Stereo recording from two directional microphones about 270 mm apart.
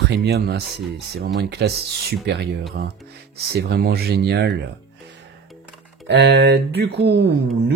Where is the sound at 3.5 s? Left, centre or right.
Right.